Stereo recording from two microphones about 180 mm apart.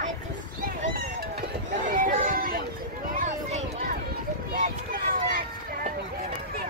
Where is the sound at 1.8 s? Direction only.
50° right (ahead or behind).